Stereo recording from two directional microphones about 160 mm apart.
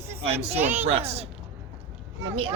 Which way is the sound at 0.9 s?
40° right (ahead or behind).